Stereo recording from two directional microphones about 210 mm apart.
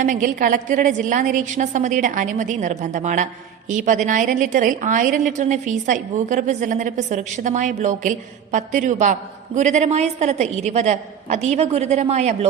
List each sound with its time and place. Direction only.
0.0 s a woman's voice: 40° right (ahead or behind)